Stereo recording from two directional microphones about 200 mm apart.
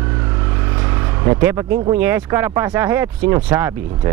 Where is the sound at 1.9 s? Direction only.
10° right (ahead or behind).